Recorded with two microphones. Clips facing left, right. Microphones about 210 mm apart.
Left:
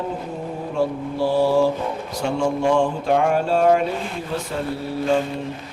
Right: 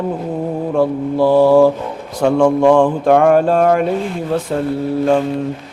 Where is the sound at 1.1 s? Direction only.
55° right (ahead or behind).